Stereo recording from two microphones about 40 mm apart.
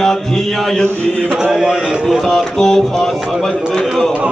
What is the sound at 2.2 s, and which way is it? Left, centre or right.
Speech, centre.